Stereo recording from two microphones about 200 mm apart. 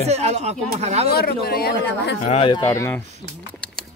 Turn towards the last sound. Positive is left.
turn(degrees=15)  # may be behind; listen again after turning